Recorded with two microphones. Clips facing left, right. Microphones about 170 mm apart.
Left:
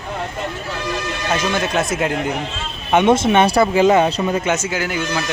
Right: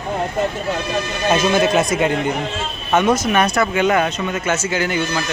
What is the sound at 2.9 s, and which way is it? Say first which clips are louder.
Speech: left 3 dB; 20° left (ahead or behind).